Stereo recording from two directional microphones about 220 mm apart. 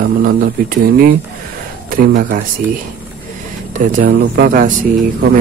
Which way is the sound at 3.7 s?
35° right (ahead or behind).